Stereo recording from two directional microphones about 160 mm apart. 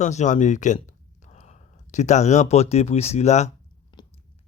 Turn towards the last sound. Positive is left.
turn(degrees=30)  # may be behind; listen again after turning